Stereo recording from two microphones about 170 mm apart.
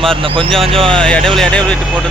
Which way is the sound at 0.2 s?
30° right (ahead or behind).